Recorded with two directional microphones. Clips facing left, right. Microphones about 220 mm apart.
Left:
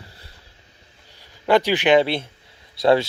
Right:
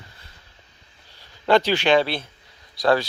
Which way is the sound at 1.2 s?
10° left (ahead or behind).